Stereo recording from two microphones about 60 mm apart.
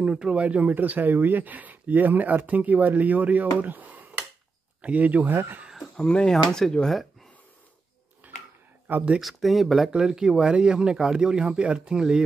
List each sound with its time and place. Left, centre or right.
0.0 s speech: centre
3.5 s a sound: right
4.8 s speech: right
5.3 s speech: right
5.9 s speech: centre
8.2 s a sound: right
8.8 s speech: right
9.2 s speech: centre